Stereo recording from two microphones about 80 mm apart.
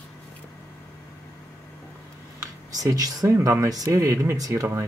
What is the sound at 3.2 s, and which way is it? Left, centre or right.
Speech, right.